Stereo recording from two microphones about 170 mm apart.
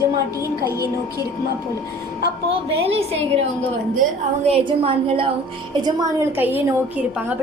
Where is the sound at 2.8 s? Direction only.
35° right (ahead or behind).